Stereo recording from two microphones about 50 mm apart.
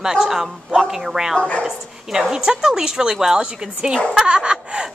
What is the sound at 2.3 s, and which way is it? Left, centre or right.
A woman's voice, centre.